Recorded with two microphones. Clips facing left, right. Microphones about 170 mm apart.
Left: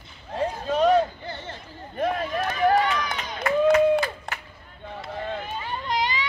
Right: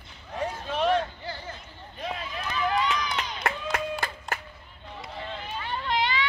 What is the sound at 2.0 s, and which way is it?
Run, 50° left (ahead or behind).